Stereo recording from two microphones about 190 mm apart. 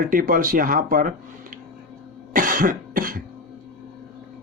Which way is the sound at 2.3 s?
45° right (ahead or behind).